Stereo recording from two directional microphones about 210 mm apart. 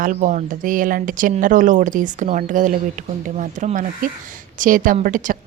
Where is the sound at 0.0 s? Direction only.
40° right (ahead or behind).